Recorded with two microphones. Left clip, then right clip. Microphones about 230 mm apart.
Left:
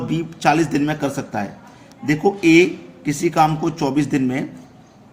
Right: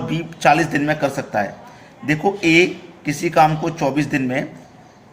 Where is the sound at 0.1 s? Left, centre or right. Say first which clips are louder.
Right 2 dB; centre.